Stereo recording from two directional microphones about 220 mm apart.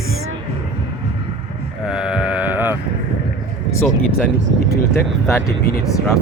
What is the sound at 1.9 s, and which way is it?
Speech, 5° right (ahead or behind).